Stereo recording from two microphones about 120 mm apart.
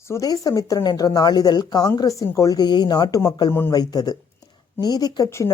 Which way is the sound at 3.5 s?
20° left (ahead or behind).